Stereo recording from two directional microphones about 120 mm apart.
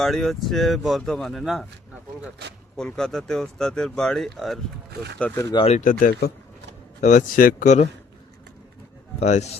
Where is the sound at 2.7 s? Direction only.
5° left (ahead or behind).